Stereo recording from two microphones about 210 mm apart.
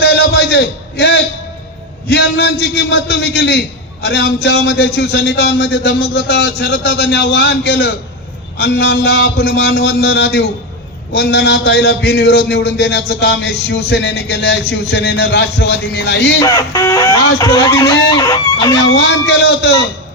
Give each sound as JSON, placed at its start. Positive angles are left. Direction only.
{"t": 0.0, "sound": "a sound", "side_deg": 50}
{"t": 2.0, "sound": "a man's voice", "side_deg": 50}
{"t": 16.4, "sound": "speech", "side_deg": 15}
{"t": 18.8, "sound": "a man's voice", "side_deg": 55}